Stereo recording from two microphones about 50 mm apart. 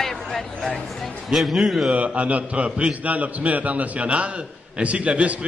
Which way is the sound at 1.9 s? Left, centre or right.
Right.